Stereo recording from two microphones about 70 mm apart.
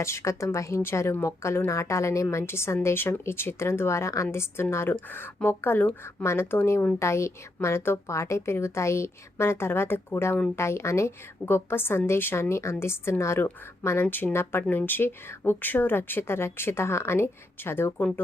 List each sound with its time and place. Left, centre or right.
0.0 s a woman's voice: left